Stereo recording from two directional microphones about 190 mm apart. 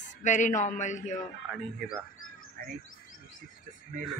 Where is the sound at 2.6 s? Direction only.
50° right (ahead or behind).